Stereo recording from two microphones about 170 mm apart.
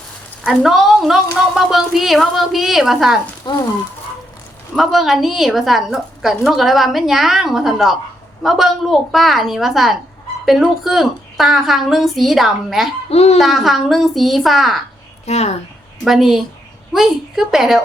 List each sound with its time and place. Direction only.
0.4 s a woman's voice: centre (ahead or behind)
3.5 s frying: 25° left (ahead or behind)
4.7 s a woman's voice: centre (ahead or behind)
13.1 s a child's voice: 35° left (ahead or behind)
13.4 s a woman's voice: centre (ahead or behind)
15.3 s speech: 40° left (ahead or behind)
16.0 s a woman's voice: centre (ahead or behind)